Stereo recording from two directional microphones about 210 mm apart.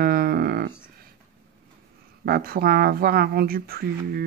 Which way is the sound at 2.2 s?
45° right (ahead or behind).